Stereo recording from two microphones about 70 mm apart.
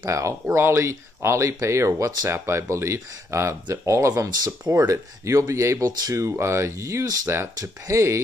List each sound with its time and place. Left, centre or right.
0.1 s speech: right
6.2 s speech: right